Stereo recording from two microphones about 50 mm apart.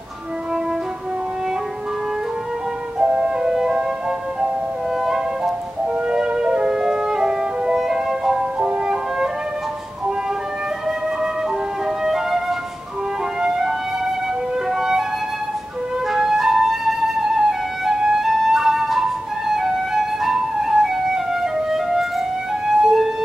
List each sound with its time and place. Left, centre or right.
3.0 s flute: centre
5.0 s music: centre
6.0 s music: centre
12.0 s flute: centre
14.7 s music: centre
16.1 s flute: centre
17.2 s music: centre
22.8 s ambulance: centre